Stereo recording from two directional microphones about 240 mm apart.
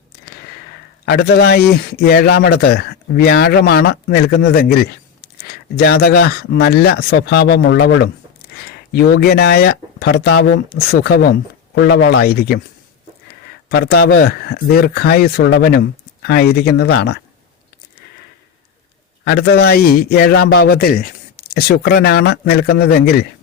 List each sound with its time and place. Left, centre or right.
1.0 s a man's voice: left
13.7 s a man's voice: left
19.2 s a man's voice: left